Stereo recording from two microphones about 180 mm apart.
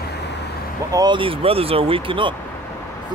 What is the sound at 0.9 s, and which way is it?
Speech, 25° right (ahead or behind).